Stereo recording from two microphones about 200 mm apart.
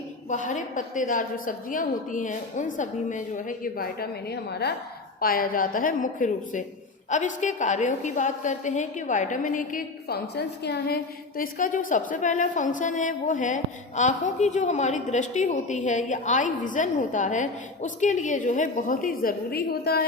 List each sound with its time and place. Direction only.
0.3 s a woman's voice: 40° left (ahead or behind)